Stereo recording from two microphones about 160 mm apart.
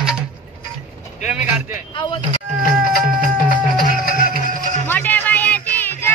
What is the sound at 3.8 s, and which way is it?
Music, 60° left (ahead or behind).